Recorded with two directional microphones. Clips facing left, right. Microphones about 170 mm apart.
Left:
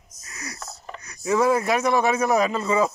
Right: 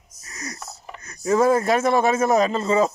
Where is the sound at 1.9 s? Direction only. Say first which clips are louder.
Right 1 dB; 25° right (ahead or behind).